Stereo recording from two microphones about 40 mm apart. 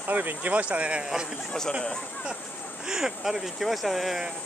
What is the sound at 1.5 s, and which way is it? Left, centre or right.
Speech, centre.